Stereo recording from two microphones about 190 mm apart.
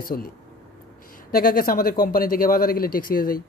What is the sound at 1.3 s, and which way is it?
Speech, 50° left (ahead or behind).